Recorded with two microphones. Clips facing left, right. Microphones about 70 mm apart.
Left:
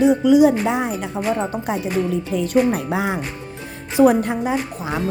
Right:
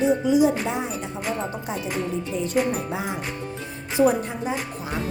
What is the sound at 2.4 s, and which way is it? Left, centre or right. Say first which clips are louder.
Speech: left 6 dB; left.